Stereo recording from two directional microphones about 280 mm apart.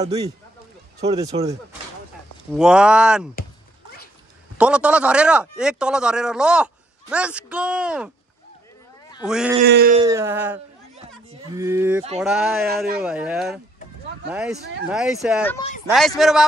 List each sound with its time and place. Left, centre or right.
0.0 s a sound: centre
2.5 s speech: centre
4.6 s speech: centre
9.2 s speech: centre
9.7 s speech: right
9.9 s a sound: centre
12.2 s speech: centre